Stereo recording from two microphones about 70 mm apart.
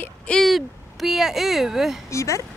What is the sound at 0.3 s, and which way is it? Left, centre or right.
Speech, centre.